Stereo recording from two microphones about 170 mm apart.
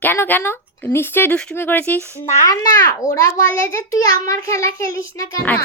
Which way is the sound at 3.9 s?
20° left (ahead or behind).